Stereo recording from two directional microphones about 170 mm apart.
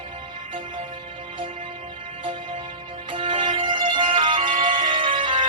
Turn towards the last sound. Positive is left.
turn(degrees=-30)  # may be behind; listen again after turning